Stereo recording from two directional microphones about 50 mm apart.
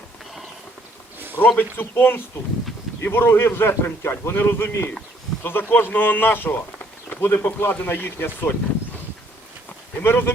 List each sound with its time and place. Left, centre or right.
1.5 s a man's voice: left
7.2 s a man's voice: left
10.0 s a man's voice: left